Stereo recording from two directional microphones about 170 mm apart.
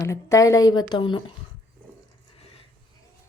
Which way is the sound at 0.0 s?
20° left (ahead or behind).